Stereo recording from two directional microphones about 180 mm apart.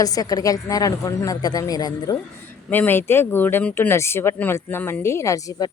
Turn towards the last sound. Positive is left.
turn(degrees=20)  # may be behind; listen again after turning